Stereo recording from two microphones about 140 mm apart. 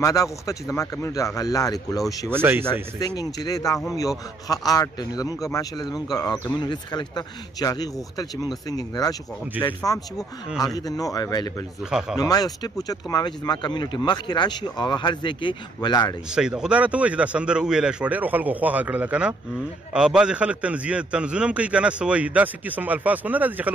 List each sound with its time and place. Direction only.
0.0 s a man's voice: 25° left (ahead or behind)
2.4 s a man's voice: 10° right (ahead or behind)
3.2 s a man's voice: 25° left (ahead or behind)
16.3 s a man's voice: 5° right (ahead or behind)